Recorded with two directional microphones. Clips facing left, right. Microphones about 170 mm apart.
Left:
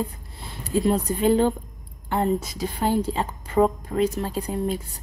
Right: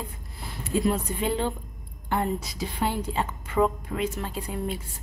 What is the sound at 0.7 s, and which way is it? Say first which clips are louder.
Speech: left 3 dB; 35° left (ahead or behind).